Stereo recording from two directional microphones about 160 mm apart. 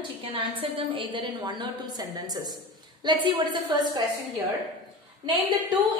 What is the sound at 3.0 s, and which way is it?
Speech, 30° right (ahead or behind).